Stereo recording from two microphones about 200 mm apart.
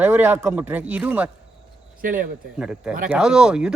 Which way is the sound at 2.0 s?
40° right (ahead or behind).